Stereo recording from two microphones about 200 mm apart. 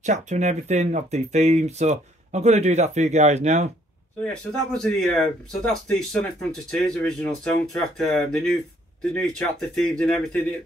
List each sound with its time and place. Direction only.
0.0 s speech: 35° right (ahead or behind)
4.2 s speech: 5° left (ahead or behind)